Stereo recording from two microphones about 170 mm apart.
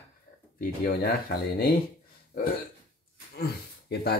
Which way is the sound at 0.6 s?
60° left (ahead or behind).